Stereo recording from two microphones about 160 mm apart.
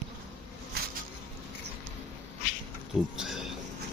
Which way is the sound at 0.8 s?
80° right.